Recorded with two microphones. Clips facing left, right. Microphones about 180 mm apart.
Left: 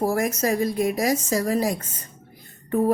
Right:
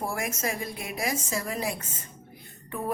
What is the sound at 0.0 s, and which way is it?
Speech, 40° left (ahead or behind).